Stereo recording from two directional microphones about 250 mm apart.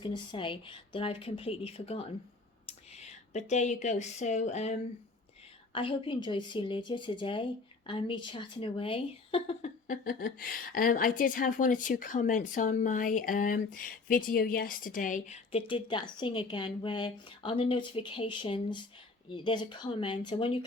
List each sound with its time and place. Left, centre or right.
0.0 s a woman's voice: centre